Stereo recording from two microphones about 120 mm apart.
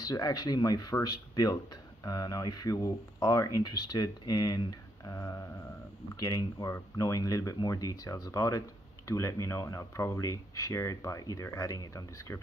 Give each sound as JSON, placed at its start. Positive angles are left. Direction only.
{"t": 0.0, "sound": "speech", "side_deg": 30}